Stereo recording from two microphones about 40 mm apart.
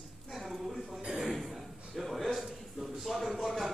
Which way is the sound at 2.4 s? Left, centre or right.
Centre.